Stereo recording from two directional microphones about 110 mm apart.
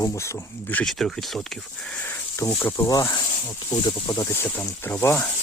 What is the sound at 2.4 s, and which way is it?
Speech, 20° left (ahead or behind).